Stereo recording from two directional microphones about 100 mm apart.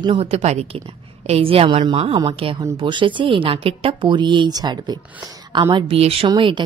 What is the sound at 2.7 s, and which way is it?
Speech, 55° right (ahead or behind).